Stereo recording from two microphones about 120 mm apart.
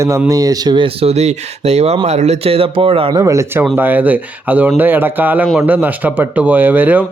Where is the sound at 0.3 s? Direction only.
30° right (ahead or behind); by 3.2 s 50° right (ahead or behind).